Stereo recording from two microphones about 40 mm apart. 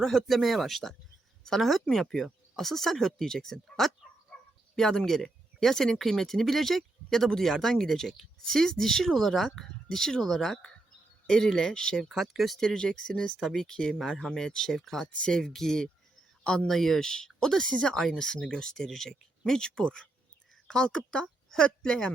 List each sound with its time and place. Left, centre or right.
0.0 s speech: centre
12.0 s speech: centre
12.6 s a man's voice: centre
16.6 s speech: centre